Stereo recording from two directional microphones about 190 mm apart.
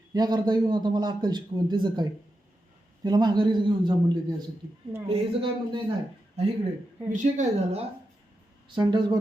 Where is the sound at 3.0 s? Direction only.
20° right (ahead or behind).